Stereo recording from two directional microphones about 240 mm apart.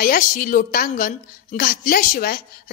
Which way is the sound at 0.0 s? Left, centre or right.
Left.